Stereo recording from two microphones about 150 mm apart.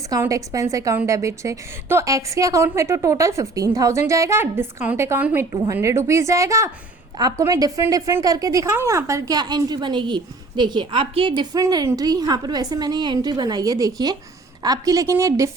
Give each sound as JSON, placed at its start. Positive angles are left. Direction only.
{"t": 0.1, "sound": "a woman's voice", "side_deg": -20}
{"t": 11.6, "sound": "a woman's voice", "side_deg": -20}